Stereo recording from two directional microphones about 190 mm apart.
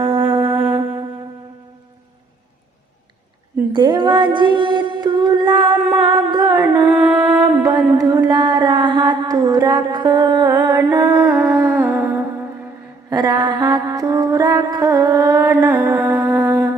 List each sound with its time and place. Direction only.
0.3 s music: 20° right (ahead or behind)
3.7 s a woman's voice: 25° right (ahead or behind)
4.4 s music: 25° right (ahead or behind)
7.9 s a sound: 20° right (ahead or behind)
13.1 s mantra: 20° right (ahead or behind)